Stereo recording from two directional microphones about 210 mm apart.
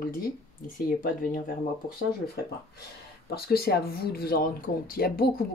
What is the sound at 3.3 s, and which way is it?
Speech, 45° left (ahead or behind).